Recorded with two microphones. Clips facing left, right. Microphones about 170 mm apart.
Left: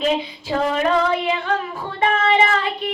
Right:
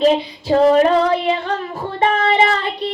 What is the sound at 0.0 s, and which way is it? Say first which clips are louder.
Child singing: right 6 dB; 40° right (ahead or behind).